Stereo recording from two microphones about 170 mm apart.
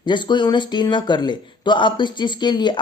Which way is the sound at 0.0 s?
25° left (ahead or behind).